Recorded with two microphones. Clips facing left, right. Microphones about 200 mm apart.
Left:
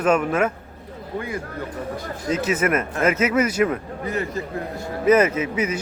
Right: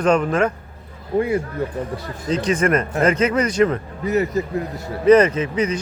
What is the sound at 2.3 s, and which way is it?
A man's voice, 5° left (ahead or behind).